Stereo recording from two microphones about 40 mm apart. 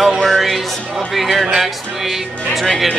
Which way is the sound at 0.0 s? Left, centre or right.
Centre.